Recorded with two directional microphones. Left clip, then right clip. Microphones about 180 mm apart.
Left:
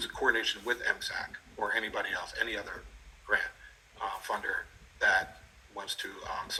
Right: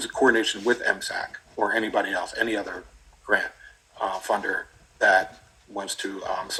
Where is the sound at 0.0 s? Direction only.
35° right (ahead or behind).